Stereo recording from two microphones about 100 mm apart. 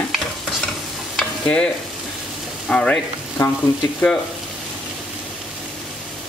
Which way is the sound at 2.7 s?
10° left (ahead or behind).